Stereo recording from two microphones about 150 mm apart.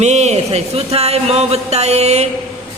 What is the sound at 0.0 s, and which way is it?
Speech, 50° right (ahead or behind).